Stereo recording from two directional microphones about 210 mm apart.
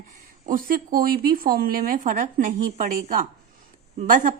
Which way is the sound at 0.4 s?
45° right (ahead or behind).